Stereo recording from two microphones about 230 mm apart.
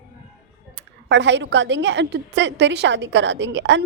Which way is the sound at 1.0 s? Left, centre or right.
Right.